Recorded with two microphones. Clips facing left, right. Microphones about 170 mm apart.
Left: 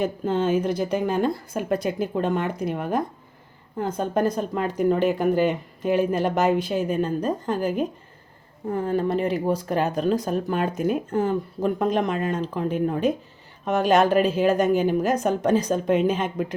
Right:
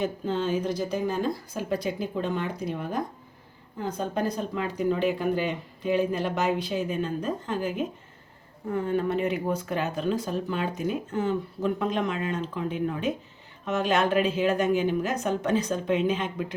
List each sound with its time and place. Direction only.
0.0 s a woman's voice: 55° left (ahead or behind)